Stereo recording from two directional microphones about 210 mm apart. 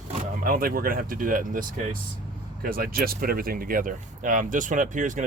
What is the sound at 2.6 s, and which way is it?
Speech, 45° right (ahead or behind).